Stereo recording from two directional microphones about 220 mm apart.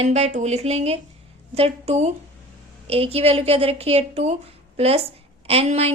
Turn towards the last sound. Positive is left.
turn(degrees=-30)  # may be behind; listen again after turning